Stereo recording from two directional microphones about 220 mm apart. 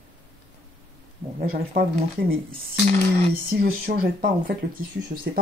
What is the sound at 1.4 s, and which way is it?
Speech, 45° right (ahead or behind).